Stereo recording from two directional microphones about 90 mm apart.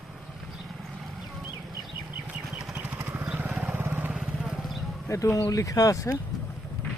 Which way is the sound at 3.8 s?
25° right (ahead or behind).